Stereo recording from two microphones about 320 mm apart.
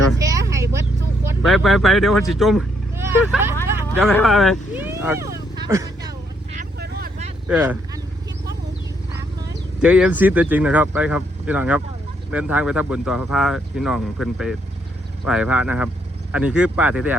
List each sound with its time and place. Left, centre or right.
0.2 s vehicle: centre
1.3 s speech: centre
3.9 s vehicle: centre
6.6 s vehicle: right
7.4 s speech: centre
9.1 s speech: centre